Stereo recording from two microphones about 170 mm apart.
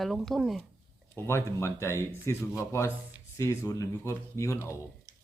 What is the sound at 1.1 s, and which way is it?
Speech, 15° left (ahead or behind).